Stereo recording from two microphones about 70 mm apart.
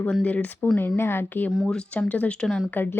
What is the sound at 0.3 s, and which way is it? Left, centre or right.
Speech, left.